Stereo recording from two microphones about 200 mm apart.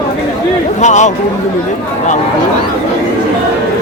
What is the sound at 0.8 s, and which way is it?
Speech, 35° left (ahead or behind).